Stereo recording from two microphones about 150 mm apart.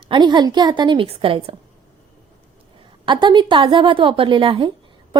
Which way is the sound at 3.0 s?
30° right (ahead or behind).